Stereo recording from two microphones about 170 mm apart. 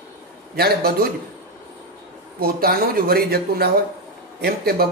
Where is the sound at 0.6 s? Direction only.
65° right (ahead or behind).